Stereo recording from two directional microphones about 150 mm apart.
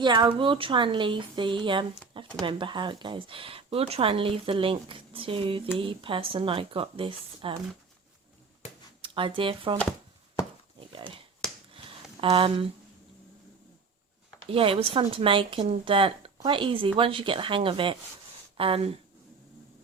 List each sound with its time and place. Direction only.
0.0 s speech: 30° right (ahead or behind)
9.0 s speech: 35° right (ahead or behind)
10.8 s dog: 35° right (ahead or behind)
12.2 s speech: 35° right (ahead or behind)
14.5 s speech: 40° right (ahead or behind)